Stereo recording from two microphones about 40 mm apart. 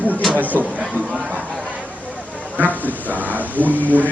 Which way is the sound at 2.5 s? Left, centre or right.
Right.